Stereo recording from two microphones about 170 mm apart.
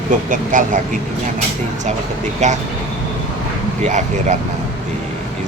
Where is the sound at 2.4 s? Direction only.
45° right (ahead or behind).